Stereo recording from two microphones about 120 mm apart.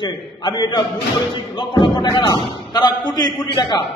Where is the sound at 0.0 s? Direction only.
40° left (ahead or behind).